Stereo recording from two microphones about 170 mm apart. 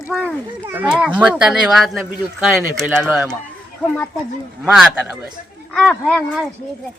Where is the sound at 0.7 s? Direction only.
10° right (ahead or behind).